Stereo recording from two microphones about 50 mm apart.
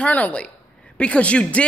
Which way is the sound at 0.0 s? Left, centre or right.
Left.